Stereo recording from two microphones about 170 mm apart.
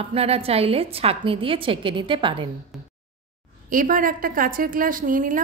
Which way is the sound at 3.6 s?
55° right (ahead or behind).